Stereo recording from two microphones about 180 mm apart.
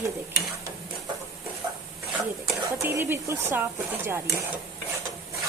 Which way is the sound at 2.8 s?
10° right (ahead or behind).